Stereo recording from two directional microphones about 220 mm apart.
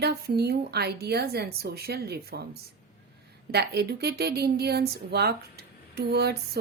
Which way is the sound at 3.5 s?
45° right (ahead or behind).